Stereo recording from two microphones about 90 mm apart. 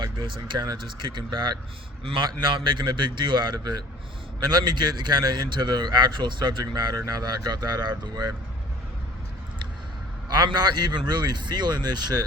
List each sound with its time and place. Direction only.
0.0 s a man's voice: 60° right (ahead or behind)
10.2 s a man's voice: 50° right (ahead or behind)